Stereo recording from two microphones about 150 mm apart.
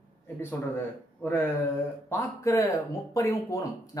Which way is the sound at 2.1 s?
20° left (ahead or behind).